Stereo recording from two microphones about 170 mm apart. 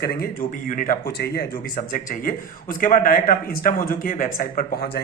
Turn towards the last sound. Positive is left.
turn(degrees=65)  # may be behind; listen again after turning